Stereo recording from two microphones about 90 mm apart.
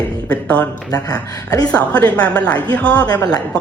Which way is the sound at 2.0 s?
15° left (ahead or behind).